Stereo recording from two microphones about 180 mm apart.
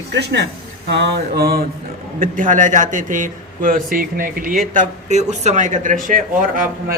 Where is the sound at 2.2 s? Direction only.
45° right (ahead or behind).